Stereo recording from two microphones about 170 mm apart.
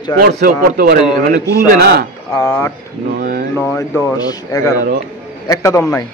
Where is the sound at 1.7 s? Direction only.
70° right (ahead or behind).